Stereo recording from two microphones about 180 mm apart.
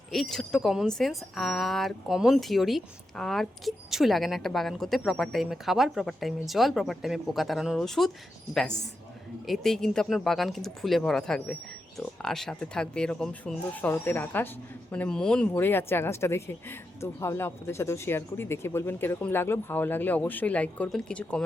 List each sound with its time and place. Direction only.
0.1 s speech: centre (ahead or behind)